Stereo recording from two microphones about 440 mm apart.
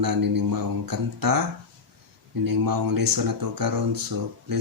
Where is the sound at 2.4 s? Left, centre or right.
Right.